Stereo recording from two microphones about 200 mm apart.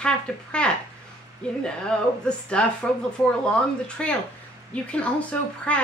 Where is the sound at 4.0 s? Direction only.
5° left (ahead or behind).